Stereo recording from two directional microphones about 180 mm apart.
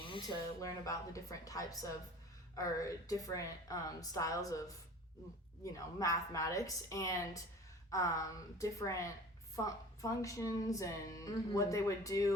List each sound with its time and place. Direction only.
0.0 s a woman's voice: 25° left (ahead or behind)
5.7 s a woman's voice: 20° left (ahead or behind)